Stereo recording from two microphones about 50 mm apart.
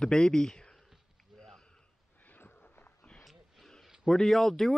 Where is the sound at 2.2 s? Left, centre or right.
Left.